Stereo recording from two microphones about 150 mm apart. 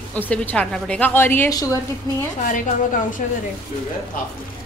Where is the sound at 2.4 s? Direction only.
60° left (ahead or behind).